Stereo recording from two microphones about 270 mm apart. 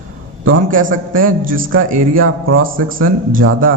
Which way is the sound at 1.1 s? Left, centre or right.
Right.